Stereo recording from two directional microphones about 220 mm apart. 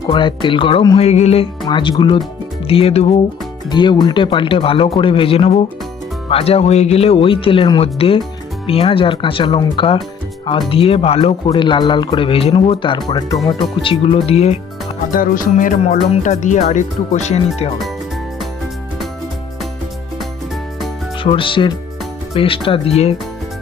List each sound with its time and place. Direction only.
0.1 s speech: 20° left (ahead or behind)
15.1 s speech: 40° left (ahead or behind)
21.2 s speech: 25° left (ahead or behind)